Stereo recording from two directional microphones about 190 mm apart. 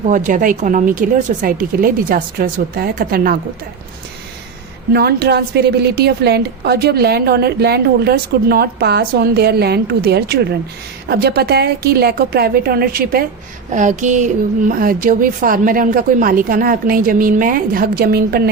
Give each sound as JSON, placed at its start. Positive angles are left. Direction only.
{"t": 0.0, "sound": "speech", "side_deg": -40}
{"t": 4.9, "sound": "a woman's voice", "side_deg": -55}